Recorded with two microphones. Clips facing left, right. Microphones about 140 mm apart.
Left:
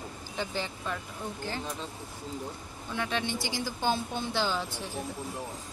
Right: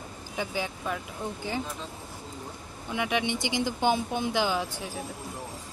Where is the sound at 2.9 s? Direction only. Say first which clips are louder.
Right 4 dB; 15° right (ahead or behind).